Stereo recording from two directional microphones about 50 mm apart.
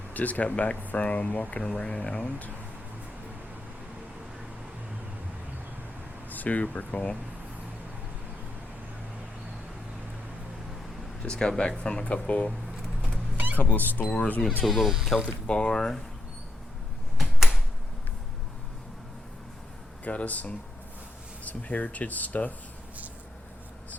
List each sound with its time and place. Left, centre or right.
0.1 s speech: left
1.6 s speech: centre
6.3 s speech: left
11.2 s speech: centre
13.3 s vehicle: right
13.6 s speech: left
14.6 s speech: centre
15.4 s speech: centre
17.2 s a sound: centre
20.1 s speech: left